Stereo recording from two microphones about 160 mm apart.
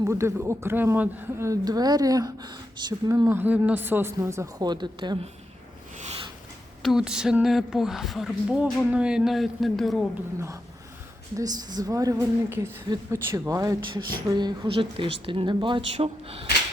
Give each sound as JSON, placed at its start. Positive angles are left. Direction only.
{"t": 0.0, "sound": "speech", "side_deg": -15}
{"t": 6.0, "sound": "rub", "side_deg": -40}
{"t": 6.8, "sound": "speech", "side_deg": -5}
{"t": 11.3, "sound": "a woman's voice", "side_deg": -25}